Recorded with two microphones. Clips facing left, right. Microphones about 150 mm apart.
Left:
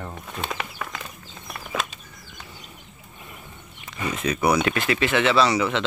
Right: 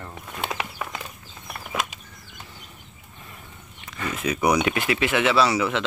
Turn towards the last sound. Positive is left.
turn(degrees=-5)  # may be behind; listen again after turning